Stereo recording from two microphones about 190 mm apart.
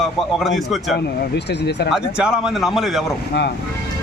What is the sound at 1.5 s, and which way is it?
Speech, 60° left (ahead or behind).